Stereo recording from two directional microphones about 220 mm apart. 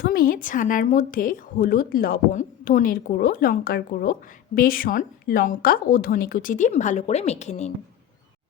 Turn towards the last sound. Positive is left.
turn(degrees=30)  # may be behind; listen again after turning